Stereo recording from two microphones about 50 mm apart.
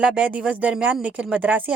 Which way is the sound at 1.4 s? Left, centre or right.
Right.